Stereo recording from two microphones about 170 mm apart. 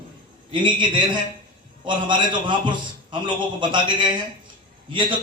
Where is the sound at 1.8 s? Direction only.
30° right (ahead or behind).